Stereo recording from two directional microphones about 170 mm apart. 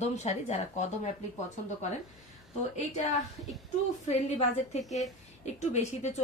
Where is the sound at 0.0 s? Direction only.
40° left (ahead or behind).